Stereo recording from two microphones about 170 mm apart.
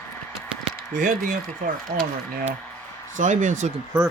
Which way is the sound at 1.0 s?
50° right (ahead or behind).